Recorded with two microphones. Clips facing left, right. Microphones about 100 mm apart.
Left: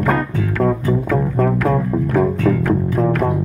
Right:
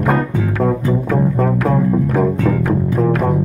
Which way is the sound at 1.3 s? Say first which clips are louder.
Right 1 dB; 5° right (ahead or behind).